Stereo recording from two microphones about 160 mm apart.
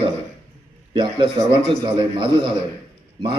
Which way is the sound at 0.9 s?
30° right (ahead or behind).